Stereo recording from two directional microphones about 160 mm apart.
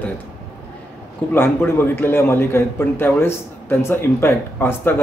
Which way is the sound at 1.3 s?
15° left (ahead or behind).